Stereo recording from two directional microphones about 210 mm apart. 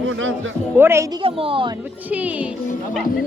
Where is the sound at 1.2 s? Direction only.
25° right (ahead or behind).